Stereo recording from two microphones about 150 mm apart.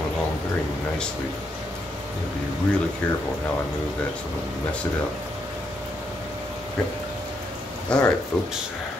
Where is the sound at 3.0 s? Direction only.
10° left (ahead or behind).